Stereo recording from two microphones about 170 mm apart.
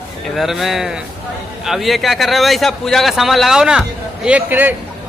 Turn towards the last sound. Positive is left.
turn(degrees=-10)  # may be behind; listen again after turning